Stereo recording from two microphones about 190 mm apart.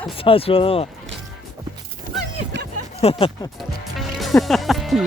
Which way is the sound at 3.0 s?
30° left (ahead or behind).